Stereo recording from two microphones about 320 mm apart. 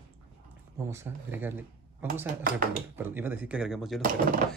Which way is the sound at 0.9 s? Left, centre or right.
Centre.